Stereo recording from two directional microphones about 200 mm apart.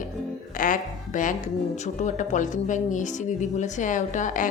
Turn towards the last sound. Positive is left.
turn(degrees=40)  # may be behind; listen again after turning